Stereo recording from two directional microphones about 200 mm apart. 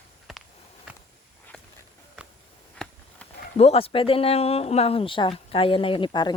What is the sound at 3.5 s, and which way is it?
Speech, 30° left (ahead or behind).